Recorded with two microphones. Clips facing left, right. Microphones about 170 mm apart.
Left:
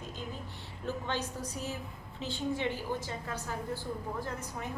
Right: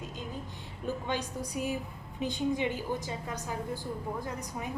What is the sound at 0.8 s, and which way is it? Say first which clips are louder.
A woman's voice: right 2 dB; 15° right (ahead or behind).